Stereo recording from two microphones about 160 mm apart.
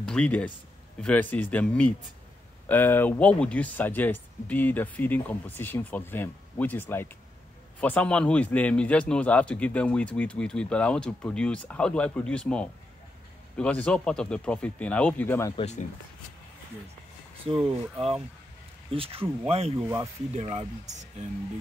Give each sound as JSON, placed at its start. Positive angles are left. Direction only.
{"t": 0.0, "sound": "a man's voice", "side_deg": 5}
{"t": 15.5, "sound": "speech", "side_deg": 45}
{"t": 17.4, "sound": "speech", "side_deg": -35}